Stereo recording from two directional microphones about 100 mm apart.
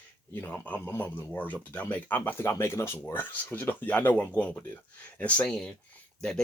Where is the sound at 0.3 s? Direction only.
20° left (ahead or behind).